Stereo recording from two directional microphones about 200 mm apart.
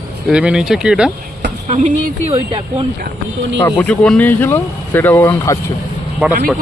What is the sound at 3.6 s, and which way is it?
Speech, 10° left (ahead or behind).